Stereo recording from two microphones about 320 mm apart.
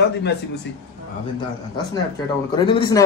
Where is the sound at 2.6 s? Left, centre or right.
Centre.